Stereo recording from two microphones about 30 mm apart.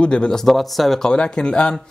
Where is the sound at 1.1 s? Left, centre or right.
Left.